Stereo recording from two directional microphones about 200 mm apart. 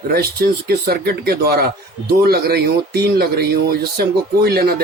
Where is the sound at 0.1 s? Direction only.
50° right (ahead or behind).